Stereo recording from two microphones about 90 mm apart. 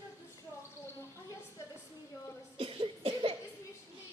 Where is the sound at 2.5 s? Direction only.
85° right.